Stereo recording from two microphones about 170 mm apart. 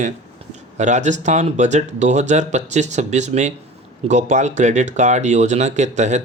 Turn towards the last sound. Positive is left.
turn(degrees=-45)  # may be behind; listen again after turning